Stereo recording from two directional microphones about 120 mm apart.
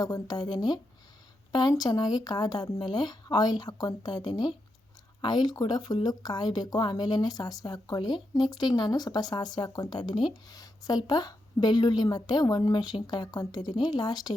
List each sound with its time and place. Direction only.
0.0 s speech: 35° left (ahead or behind)